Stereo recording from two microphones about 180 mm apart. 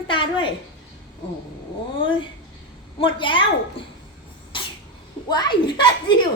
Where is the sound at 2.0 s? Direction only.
30° left (ahead or behind).